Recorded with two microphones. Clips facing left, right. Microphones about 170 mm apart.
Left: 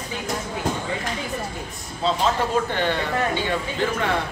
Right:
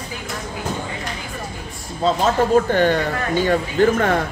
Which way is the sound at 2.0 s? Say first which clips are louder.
Right 4 dB; 45° right (ahead or behind).